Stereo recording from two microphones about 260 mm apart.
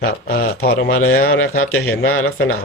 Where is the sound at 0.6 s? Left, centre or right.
Left.